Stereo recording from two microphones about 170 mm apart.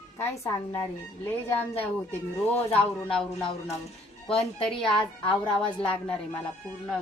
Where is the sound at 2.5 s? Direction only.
10° left (ahead or behind).